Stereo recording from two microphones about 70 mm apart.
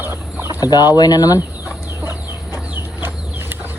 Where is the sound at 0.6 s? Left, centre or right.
Left.